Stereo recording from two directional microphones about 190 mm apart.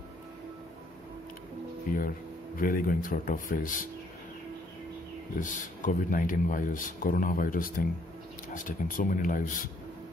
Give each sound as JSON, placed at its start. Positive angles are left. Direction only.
{"t": 1.9, "sound": "speech", "side_deg": 45}
{"t": 5.4, "sound": "speech", "side_deg": 45}